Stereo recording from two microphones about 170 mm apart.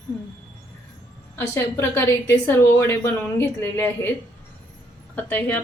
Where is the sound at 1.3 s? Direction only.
15° left (ahead or behind).